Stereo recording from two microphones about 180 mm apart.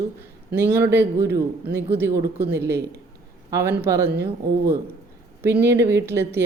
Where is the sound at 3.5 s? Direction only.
15° right (ahead or behind).